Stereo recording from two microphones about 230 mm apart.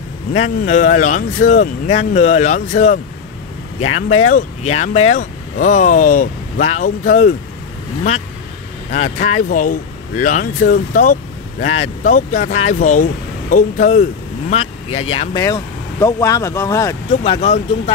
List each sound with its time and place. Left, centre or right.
0.3 s speech: left
8.9 s speech: left; by 16.9 s centre
17.1 s speech: left